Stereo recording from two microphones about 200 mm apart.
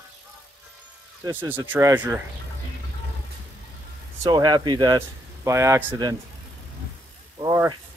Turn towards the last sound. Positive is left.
turn(degrees=-20)  # may be behind; listen again after turning